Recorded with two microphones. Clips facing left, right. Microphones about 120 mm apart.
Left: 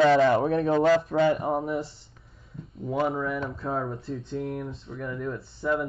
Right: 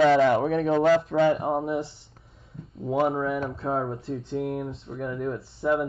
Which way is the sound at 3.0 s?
25° right (ahead or behind).